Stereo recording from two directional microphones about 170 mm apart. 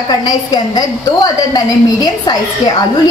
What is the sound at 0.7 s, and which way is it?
A woman's voice, 20° left (ahead or behind).